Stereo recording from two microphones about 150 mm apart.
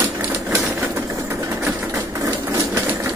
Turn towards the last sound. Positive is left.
turn(degrees=-15)  # may be behind; listen again after turning